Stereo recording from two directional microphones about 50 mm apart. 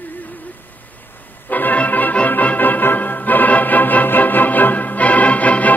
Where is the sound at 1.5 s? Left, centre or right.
Left.